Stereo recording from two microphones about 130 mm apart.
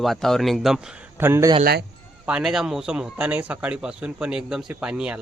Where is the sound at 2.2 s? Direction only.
5° right (ahead or behind).